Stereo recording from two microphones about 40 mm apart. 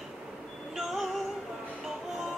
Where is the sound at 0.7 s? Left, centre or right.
Centre.